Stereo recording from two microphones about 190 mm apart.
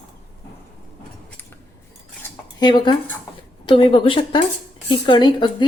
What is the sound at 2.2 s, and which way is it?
Cutlery, 20° left (ahead or behind).